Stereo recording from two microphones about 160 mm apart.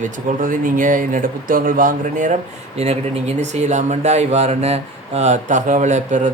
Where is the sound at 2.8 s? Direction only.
40° right (ahead or behind).